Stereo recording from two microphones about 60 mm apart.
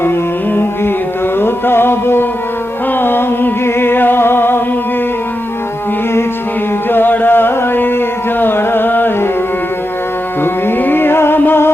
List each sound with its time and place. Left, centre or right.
0.0 s music: left
6.9 s a sound: left
10.4 s music: left